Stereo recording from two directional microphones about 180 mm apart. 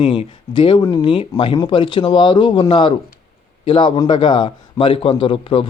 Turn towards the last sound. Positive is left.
turn(degrees=30)  # may be behind; listen again after turning